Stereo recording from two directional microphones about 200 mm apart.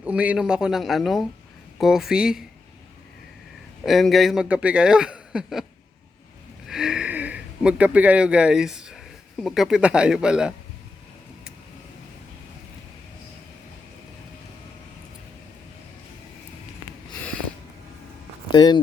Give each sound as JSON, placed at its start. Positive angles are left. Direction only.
{"t": 0.0, "sound": "a man's voice", "side_deg": -5}
{"t": 3.8, "sound": "a man's voice", "side_deg": 0}
{"t": 6.7, "sound": "a man's voice", "side_deg": -5}
{"t": 18.5, "sound": "speech", "side_deg": 20}